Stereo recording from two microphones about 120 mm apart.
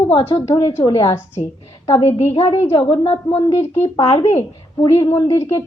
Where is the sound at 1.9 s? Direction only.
55° left (ahead or behind).